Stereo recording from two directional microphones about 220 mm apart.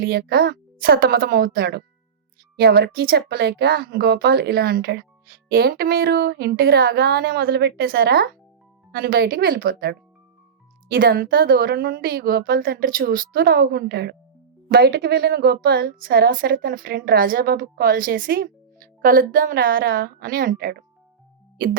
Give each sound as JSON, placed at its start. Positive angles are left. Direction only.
{"t": 0.0, "sound": "a woman's voice", "side_deg": -45}